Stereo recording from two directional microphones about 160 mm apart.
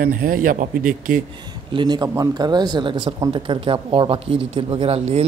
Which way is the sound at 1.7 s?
25° right (ahead or behind).